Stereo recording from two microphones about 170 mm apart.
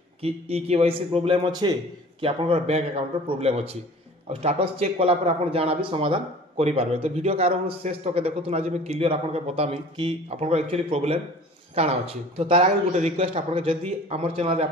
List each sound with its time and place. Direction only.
0.2 s a man's voice: 35° right (ahead or behind)